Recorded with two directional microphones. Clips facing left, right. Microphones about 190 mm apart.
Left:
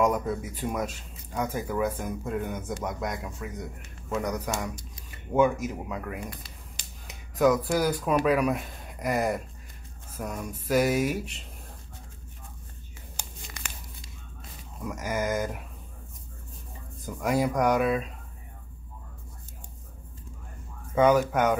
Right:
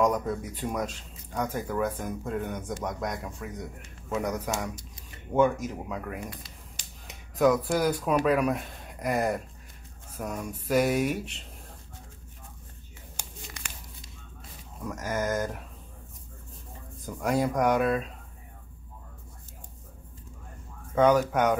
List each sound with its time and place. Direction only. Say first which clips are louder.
0.0 s speech: even; 5° left (ahead or behind)
5.3 s speech: left 1 dB; 5° left (ahead or behind)
13.1 s a sound: even; 30° left (ahead or behind)
14.8 s speech: left 1 dB; 10° left (ahead or behind)
17.0 s speech: left 1 dB; 5° left (ahead or behind)
20.9 s speech: left 1 dB; 5° left (ahead or behind)